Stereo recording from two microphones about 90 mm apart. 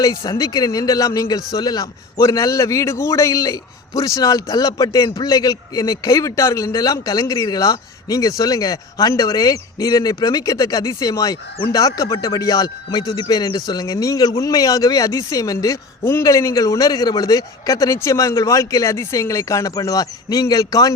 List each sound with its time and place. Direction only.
0.3 s a man's voice: 45° left (ahead or behind)